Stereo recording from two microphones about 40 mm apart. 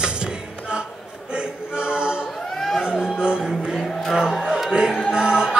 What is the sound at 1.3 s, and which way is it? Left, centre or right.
A capella, right.